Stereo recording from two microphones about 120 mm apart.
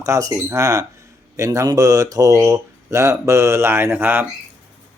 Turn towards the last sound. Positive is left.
turn(degrees=-15)  # may be behind; listen again after turning